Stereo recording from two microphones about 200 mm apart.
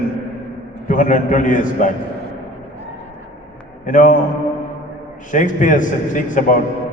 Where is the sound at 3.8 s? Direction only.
40° left (ahead or behind).